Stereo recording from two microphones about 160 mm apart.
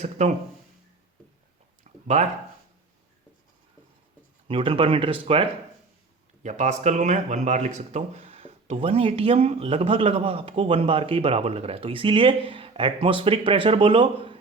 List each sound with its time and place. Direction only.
1.8 s a sound: 45° right (ahead or behind)
4.4 s speech: 35° right (ahead or behind)
6.4 s speech: 45° right (ahead or behind)